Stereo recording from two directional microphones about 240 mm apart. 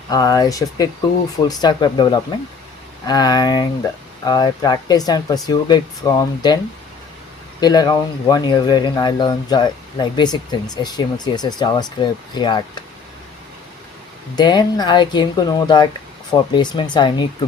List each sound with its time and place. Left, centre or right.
0.1 s speech: centre
7.6 s speech: centre
14.3 s speech: centre